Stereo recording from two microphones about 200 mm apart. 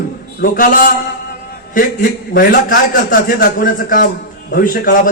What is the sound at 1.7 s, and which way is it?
A man's voice, 45° left (ahead or behind).